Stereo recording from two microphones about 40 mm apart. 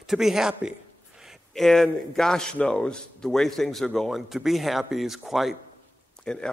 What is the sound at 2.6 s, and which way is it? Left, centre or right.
Speech, left.